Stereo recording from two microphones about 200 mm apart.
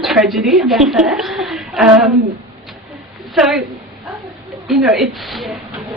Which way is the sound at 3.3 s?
Centre (ahead or behind).